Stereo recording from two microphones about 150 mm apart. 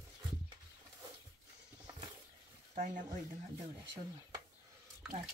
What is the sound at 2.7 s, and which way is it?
Speech, 55° right (ahead or behind).